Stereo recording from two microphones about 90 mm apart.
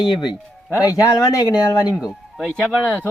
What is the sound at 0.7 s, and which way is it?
Speech, 35° left (ahead or behind).